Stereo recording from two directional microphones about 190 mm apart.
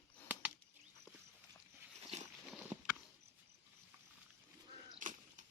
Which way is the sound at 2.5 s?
5° right (ahead or behind).